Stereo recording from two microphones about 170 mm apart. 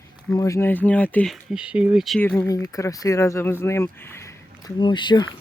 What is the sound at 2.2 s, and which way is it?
Speech, 10° left (ahead or behind).